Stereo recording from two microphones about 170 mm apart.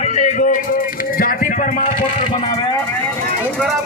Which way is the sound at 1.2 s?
55° left (ahead or behind).